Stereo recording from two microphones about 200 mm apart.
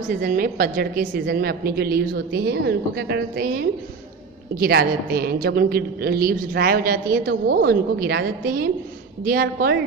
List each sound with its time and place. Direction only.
0.2 s a woman's voice: 45° right (ahead or behind)